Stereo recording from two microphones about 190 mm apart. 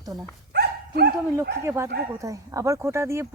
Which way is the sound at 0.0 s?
20° right (ahead or behind).